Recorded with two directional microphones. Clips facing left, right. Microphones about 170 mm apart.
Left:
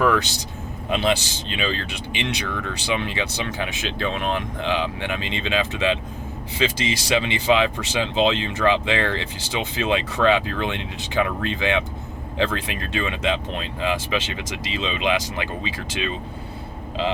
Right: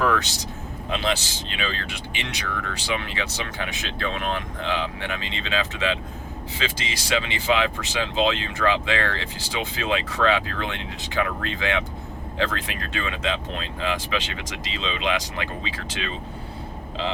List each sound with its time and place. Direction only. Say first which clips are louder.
0.9 s speech: left 4 dB; 20° left (ahead or behind)